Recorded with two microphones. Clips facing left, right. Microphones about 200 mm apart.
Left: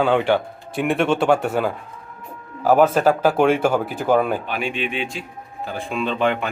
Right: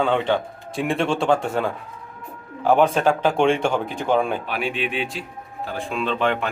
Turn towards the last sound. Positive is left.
turn(degrees=0)  # may be behind; listen again after turning